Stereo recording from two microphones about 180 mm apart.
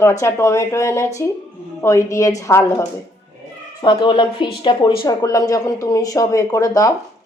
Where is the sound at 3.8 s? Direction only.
25° left (ahead or behind).